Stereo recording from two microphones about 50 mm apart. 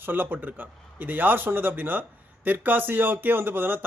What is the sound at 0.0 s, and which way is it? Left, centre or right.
A man's voice, right.